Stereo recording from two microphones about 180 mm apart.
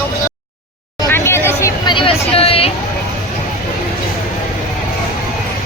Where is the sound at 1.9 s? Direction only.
30° left (ahead or behind).